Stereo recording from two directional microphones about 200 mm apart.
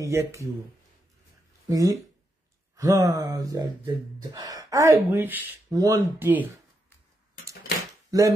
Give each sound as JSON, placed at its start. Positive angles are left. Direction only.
{"t": 0.0, "sound": "speech", "side_deg": -15}
{"t": 1.7, "sound": "speech", "side_deg": -15}
{"t": 8.1, "sound": "speech", "side_deg": -15}